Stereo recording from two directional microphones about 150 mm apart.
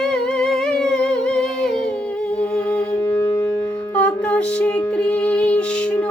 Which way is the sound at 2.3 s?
5° left (ahead or behind).